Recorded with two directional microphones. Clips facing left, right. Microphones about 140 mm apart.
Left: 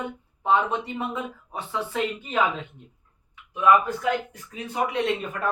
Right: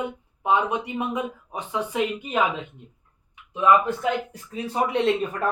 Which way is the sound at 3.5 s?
25° right (ahead or behind).